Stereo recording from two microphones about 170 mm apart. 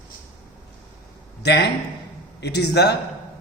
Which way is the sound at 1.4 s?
80° left.